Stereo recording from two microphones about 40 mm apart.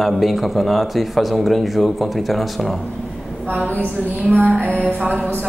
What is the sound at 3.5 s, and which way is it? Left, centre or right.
Speech, right.